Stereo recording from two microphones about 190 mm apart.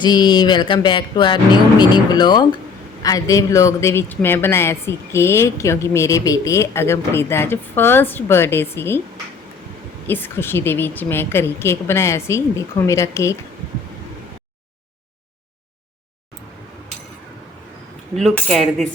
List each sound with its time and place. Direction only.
0.0 s music: 25° left (ahead or behind)
3.0 s speech: 20° left (ahead or behind)
10.1 s speech: 10° left (ahead or behind)
18.1 s cutlery: 5° left (ahead or behind)